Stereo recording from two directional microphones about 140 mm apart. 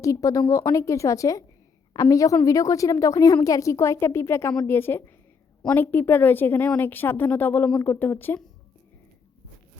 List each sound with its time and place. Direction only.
0.0 s a woman's voice: 25° left (ahead or behind)